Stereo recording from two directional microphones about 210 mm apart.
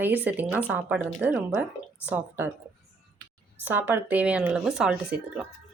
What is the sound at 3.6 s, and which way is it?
Speech, 10° right (ahead or behind).